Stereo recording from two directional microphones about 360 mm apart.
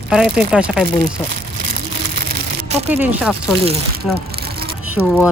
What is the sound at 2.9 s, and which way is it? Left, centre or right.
Speech, centre.